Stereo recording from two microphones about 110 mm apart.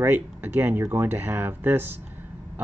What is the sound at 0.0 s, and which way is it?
Speech, 15° right (ahead or behind).